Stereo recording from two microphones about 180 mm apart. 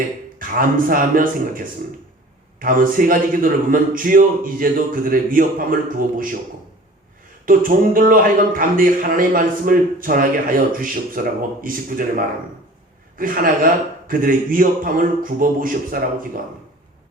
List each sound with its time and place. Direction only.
0.3 s speech: 50° right (ahead or behind)
7.4 s speech: 50° right (ahead or behind)